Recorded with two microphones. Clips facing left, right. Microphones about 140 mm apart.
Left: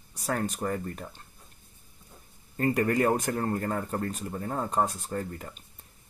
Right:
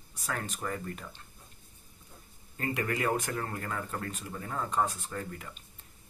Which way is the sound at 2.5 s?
45° left (ahead or behind).